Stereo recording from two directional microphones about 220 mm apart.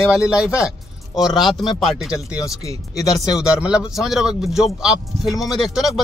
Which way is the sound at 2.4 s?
15° left (ahead or behind).